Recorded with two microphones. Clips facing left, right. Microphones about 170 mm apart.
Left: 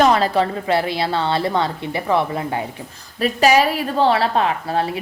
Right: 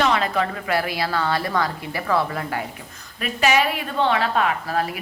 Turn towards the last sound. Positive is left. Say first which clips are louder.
# left 3 dB
turn(degrees=30)  # may be behind; listen again after turning